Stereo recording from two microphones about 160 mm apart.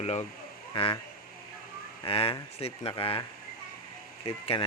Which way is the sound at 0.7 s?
30° left (ahead or behind).